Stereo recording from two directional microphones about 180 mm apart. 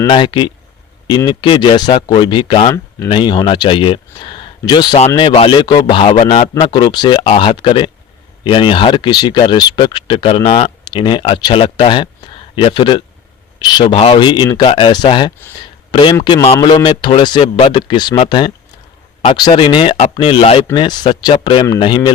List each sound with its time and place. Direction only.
0.1 s speech: 25° left (ahead or behind)
15.6 s a sound: 25° left (ahead or behind)
16.2 s speech: 30° left (ahead or behind)